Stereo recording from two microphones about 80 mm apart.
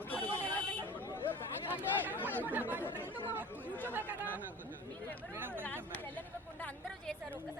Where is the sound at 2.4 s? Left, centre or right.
Right.